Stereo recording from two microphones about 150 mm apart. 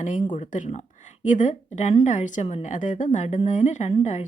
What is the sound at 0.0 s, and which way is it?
A woman's voice, 55° left (ahead or behind).